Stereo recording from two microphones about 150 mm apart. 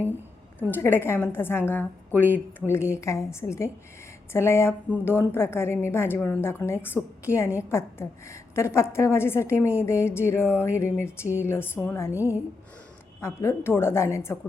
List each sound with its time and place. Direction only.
0.7 s a woman's voice: 15° left (ahead or behind)